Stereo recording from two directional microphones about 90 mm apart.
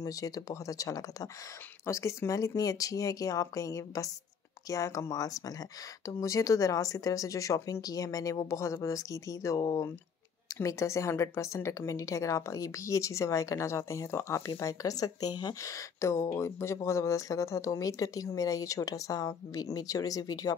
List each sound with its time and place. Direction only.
0.0 s speech: 40° left (ahead or behind)